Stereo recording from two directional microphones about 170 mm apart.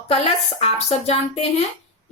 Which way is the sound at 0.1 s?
35° left (ahead or behind).